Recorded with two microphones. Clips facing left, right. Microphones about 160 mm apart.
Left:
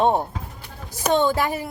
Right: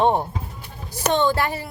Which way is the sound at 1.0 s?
10° left (ahead or behind).